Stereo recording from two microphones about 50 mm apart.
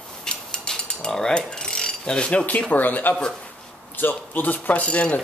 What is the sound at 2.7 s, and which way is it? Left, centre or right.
Speech, left.